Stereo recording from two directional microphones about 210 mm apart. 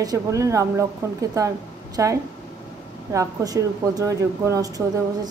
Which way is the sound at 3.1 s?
15° right (ahead or behind).